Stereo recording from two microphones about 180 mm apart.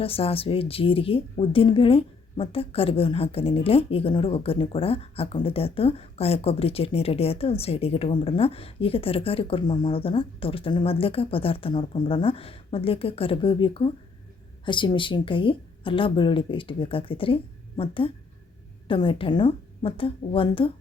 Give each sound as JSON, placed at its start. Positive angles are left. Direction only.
{"t": 0.0, "sound": "speech", "side_deg": 30}